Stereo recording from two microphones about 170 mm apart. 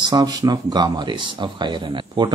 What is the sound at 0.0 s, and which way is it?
Speech, 20° right (ahead or behind).